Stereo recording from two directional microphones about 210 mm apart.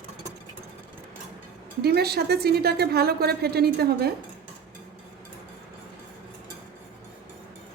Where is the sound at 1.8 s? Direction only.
50° right (ahead or behind).